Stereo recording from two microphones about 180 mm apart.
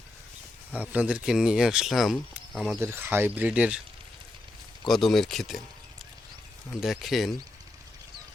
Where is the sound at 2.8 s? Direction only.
10° right (ahead or behind).